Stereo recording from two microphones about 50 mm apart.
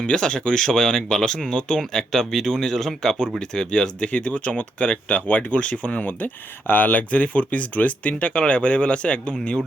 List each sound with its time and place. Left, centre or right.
0.0 s speech: centre